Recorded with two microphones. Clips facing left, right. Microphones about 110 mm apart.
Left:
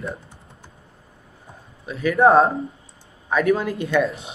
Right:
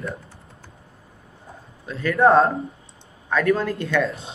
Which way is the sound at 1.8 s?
5° left (ahead or behind).